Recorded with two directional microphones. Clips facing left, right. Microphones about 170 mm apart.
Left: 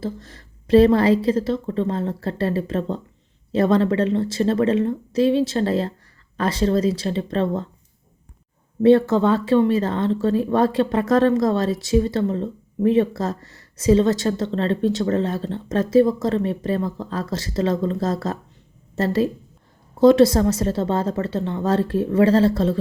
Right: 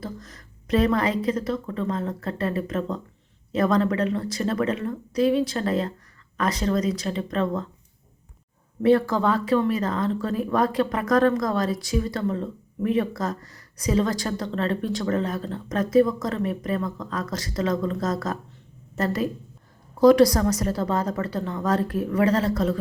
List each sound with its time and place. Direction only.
0.0 s speech: 30° left (ahead or behind)
8.8 s speech: 25° left (ahead or behind)